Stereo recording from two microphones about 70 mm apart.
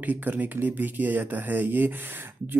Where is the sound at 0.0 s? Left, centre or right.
Right.